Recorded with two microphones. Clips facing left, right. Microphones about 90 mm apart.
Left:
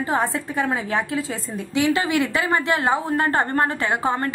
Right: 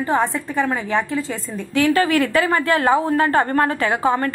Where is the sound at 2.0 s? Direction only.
20° left (ahead or behind).